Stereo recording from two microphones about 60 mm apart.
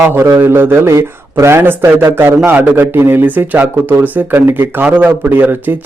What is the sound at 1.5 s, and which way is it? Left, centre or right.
Speech, right.